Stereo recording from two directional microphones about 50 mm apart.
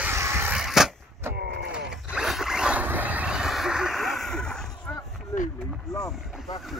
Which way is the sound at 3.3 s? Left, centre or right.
Centre.